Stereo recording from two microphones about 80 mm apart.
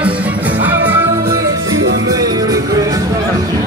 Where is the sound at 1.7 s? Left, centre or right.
Right.